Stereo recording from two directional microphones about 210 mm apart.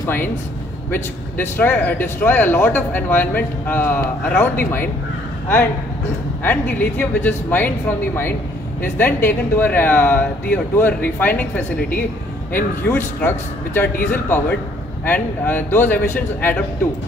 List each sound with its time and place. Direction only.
0.0 s a man's voice: 10° left (ahead or behind)
6.4 s a man's voice: 10° left (ahead or behind)
8.8 s a man's voice: 10° left (ahead or behind)
15.0 s a man's voice: 10° left (ahead or behind)